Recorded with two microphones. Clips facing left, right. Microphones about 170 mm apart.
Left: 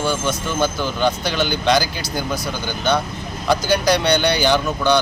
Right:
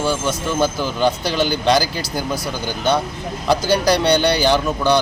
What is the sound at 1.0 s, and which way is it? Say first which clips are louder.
Speech: right 2 dB; 35° right (ahead or behind).